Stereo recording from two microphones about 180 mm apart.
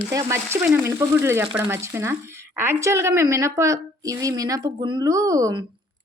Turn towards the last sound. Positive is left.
turn(degrees=-20)  # may be behind; listen again after turning